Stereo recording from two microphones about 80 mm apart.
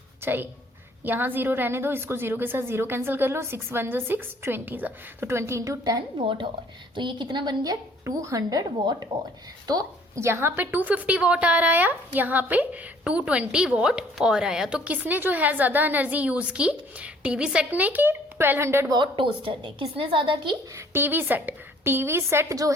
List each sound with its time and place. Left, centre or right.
0.2 s a woman's voice: right
5.4 s a woman's voice: right
6.1 s a woman's voice: right
6.9 s a woman's voice: right
10.2 s a woman's voice: right
18.9 s a woman's voice: right
20.7 s a woman's voice: right